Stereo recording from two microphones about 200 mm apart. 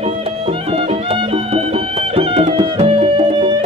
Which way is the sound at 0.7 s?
30° right (ahead or behind).